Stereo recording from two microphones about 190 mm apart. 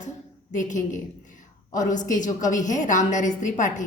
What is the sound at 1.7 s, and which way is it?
A woman's voice, 40° left (ahead or behind).